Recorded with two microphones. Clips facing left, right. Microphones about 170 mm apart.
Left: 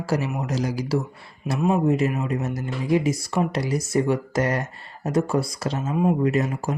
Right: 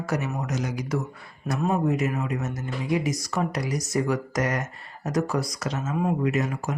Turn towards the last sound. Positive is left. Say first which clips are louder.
# left 3 dB
turn(degrees=35)  # may be behind; listen again after turning